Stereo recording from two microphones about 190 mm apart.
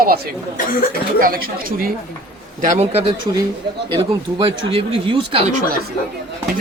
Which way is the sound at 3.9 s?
25° right (ahead or behind).